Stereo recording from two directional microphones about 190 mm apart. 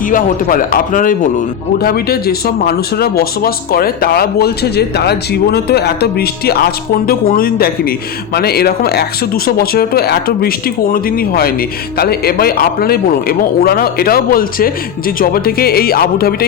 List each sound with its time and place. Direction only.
0.1 s speech: 45° left (ahead or behind)